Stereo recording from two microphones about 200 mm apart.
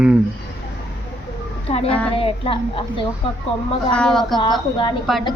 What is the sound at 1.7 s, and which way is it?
Speech, 30° left (ahead or behind).